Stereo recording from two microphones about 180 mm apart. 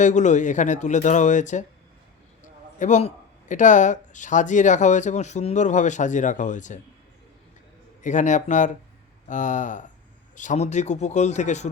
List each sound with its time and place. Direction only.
0.0 s speech: 40° left (ahead or behind)
2.7 s a man's voice: 40° left (ahead or behind)
8.0 s a man's voice: 45° left (ahead or behind)